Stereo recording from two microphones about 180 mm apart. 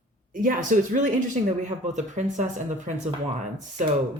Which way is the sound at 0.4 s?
45° right (ahead or behind).